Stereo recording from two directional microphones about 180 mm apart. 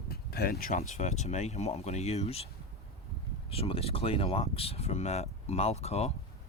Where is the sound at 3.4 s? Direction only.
30° left (ahead or behind).